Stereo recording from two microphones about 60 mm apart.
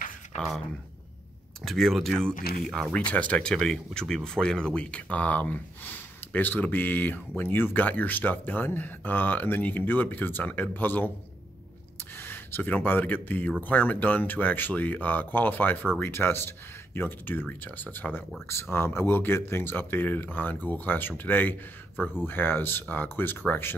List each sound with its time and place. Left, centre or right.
1.6 s speech: centre
3.0 s speech: left
3.5 s speech: centre; by 11.1 s left
12.3 s speech: left